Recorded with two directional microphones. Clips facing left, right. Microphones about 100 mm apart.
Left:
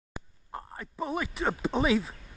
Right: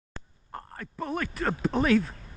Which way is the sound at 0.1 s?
5° left (ahead or behind).